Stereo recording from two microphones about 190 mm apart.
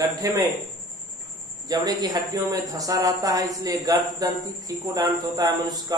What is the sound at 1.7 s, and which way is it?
Speech, 20° right (ahead or behind).